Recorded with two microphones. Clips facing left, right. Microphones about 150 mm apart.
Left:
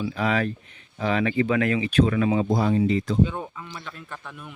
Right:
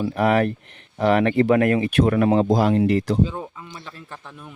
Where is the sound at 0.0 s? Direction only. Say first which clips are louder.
Right 5 dB; 60° right (ahead or behind); by 3.2 s 75° right (ahead or behind).